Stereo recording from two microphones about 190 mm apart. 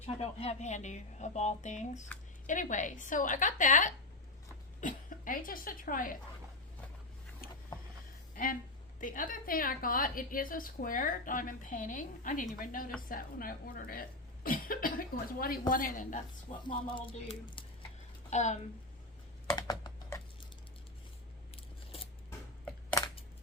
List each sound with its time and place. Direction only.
0.0 s a woman's voice: 30° left (ahead or behind)
7.4 s a sound: 50° left (ahead or behind)
9.0 s a woman's voice: 45° left (ahead or behind)
18.3 s a woman's voice: 40° left (ahead or behind)
19.5 s computer keyboard: 20° left (ahead or behind)
19.8 s typing: 20° left (ahead or behind)